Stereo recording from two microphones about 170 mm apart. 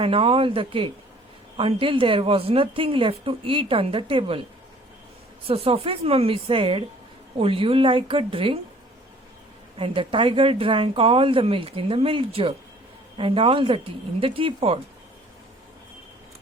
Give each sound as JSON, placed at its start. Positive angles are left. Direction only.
{"t": 0.0, "sound": "a woman's voice", "side_deg": -35}
{"t": 5.5, "sound": "a woman's voice", "side_deg": -35}
{"t": 9.7, "sound": "a woman's voice", "side_deg": -30}